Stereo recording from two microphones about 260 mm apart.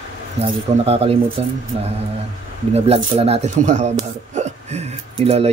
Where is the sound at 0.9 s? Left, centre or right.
Right.